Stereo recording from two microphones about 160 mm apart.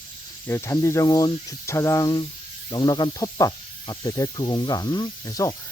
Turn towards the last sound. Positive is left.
turn(degrees=20)  # may be behind; listen again after turning